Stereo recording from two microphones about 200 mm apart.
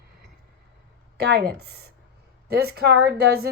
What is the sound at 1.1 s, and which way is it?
Speech, 55° right (ahead or behind).